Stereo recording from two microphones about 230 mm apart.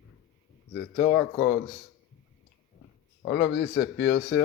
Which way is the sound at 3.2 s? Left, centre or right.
Left.